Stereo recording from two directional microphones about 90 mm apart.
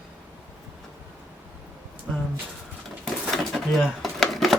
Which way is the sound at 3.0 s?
Centre (ahead or behind).